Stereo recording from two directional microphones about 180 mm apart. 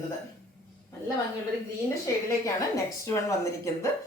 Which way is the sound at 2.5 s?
15° left (ahead or behind).